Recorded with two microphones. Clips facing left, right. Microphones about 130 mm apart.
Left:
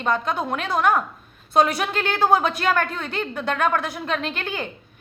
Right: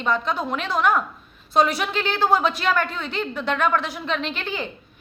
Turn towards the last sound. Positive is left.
turn(degrees=50)  # may be behind; listen again after turning